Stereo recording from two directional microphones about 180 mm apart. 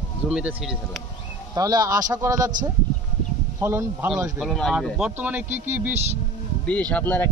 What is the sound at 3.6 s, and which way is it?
Speech, 15° right (ahead or behind).